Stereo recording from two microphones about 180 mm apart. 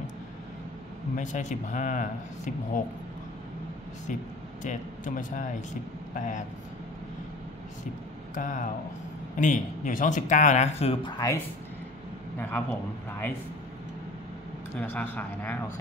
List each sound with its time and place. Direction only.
1.1 s speech: 45° left (ahead or behind)
4.6 s speech: 45° left (ahead or behind)
8.4 s speech: 45° left (ahead or behind)
11.1 s speech: 20° left (ahead or behind)
14.8 s speech: 10° left (ahead or behind)